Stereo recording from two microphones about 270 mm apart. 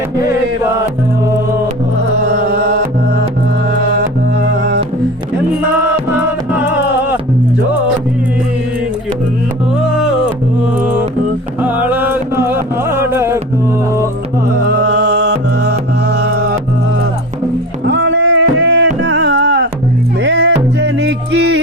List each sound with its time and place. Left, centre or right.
11.6 s music: centre
14.8 s music: right
17.8 s a sound: right
20.2 s music: right